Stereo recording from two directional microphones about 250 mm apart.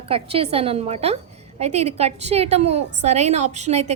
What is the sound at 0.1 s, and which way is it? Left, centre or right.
A woman's voice, right.